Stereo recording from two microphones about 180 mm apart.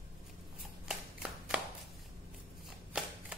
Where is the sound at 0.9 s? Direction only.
5° right (ahead or behind).